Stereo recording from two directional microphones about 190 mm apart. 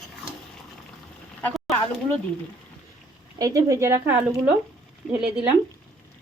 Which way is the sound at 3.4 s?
15° right (ahead or behind).